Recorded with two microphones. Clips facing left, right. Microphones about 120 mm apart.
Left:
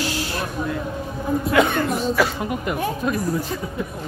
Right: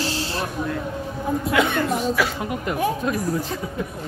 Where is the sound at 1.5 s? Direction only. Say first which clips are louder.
Left 3 dB; 45° left (ahead or behind).